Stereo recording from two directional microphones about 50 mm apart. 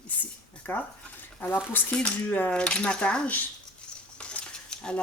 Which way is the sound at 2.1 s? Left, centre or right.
Left.